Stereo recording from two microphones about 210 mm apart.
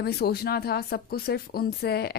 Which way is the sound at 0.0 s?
50° left (ahead or behind).